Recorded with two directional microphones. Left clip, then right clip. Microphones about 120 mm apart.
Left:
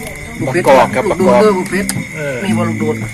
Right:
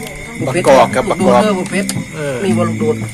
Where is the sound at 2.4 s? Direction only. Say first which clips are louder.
Right 4 dB; 30° right (ahead or behind).